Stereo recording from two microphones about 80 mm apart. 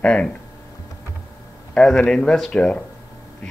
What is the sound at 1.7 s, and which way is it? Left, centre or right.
Speech, centre.